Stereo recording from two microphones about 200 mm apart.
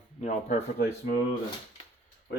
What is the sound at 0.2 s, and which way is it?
Speech, 35° left (ahead or behind).